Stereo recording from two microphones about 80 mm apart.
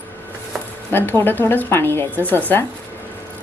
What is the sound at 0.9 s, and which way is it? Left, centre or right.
Speech, left.